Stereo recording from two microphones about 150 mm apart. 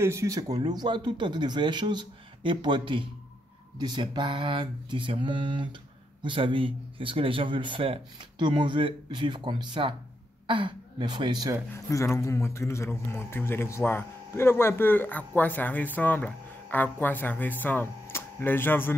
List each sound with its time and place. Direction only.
0.0 s a man's voice: 20° right (ahead or behind)
11.7 s speech: 20° left (ahead or behind)